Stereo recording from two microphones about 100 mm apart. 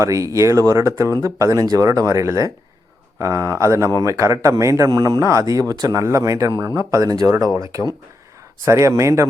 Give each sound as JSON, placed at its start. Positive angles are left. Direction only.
{"t": 0.0, "sound": "a man's voice", "side_deg": -30}